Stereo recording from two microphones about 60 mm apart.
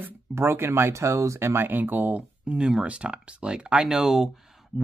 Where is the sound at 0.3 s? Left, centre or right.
Right.